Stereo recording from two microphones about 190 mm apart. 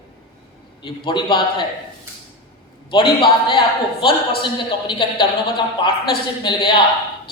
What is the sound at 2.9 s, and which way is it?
Speech, 25° left (ahead or behind).